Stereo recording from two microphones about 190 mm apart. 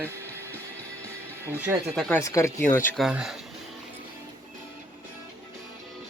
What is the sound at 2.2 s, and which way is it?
Speech, 15° left (ahead or behind).